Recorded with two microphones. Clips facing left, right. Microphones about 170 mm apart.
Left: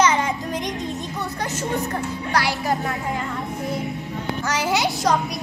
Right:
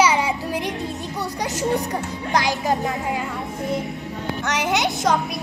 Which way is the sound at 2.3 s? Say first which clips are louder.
Right 2 dB; 20° right (ahead or behind).